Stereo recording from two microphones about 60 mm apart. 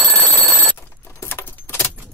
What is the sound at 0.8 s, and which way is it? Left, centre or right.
Keys jangling, left.